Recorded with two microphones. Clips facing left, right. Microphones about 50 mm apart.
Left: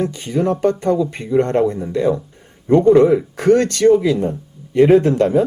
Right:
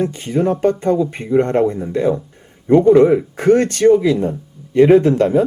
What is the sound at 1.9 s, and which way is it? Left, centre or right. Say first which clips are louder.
Speech: even; right.